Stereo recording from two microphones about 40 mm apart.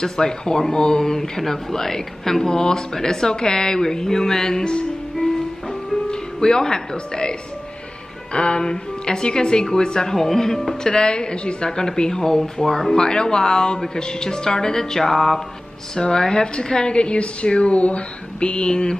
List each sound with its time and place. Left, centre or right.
0.0 s speech: centre
6.0 s a woman's voice: centre
10.9 s a woman's voice: left